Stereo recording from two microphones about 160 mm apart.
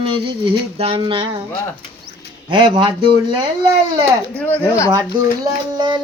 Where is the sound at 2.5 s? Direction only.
30° right (ahead or behind).